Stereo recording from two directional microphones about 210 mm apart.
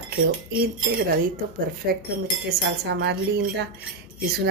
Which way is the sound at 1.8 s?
50° right (ahead or behind).